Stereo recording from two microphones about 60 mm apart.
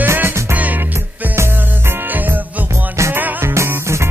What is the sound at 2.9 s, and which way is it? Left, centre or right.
Music, right.